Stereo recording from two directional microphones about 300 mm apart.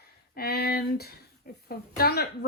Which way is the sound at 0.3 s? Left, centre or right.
Left.